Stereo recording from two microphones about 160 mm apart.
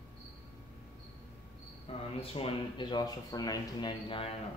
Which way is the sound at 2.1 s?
35° left (ahead or behind).